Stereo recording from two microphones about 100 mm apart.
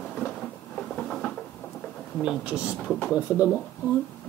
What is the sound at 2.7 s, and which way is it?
Speech, 5° left (ahead or behind).